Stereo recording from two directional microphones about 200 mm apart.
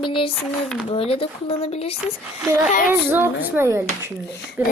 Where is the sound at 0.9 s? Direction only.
30° left (ahead or behind).